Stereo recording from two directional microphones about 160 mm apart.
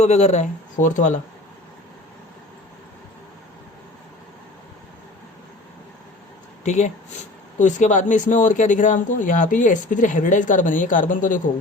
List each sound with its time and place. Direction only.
0.0 s speech: 45° left (ahead or behind)
6.7 s speech: 50° left (ahead or behind)